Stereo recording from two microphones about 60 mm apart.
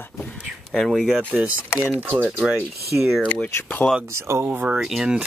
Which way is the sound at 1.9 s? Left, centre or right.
Right.